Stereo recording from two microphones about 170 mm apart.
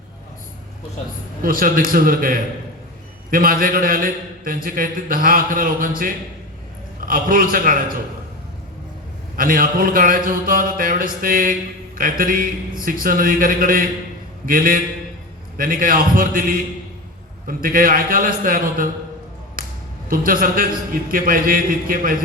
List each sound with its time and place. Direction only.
1.4 s a man's voice: 55° right (ahead or behind)
7.0 s a man's voice: 55° right (ahead or behind)
9.3 s a man's voice: 55° right (ahead or behind)
19.6 s finger snapping: 55° right (ahead or behind)
20.1 s a man's voice: 55° right (ahead or behind)